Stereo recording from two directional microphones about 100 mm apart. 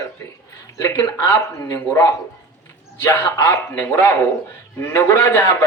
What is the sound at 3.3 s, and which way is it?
A man's voice, 30° left (ahead or behind).